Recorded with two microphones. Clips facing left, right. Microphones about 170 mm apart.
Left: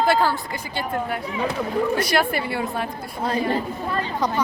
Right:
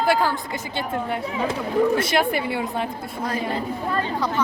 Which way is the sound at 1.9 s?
25° right (ahead or behind).